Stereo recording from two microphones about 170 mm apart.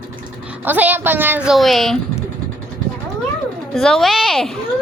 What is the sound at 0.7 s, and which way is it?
Speech, 10° right (ahead or behind).